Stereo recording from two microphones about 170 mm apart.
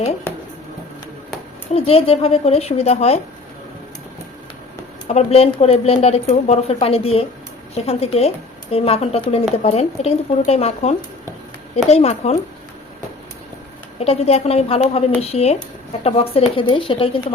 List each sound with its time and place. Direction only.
1.7 s a woman's voice: 35° left (ahead or behind)
5.0 s a woman's voice: 40° left (ahead or behind)
14.0 s a woman's voice: 35° left (ahead or behind)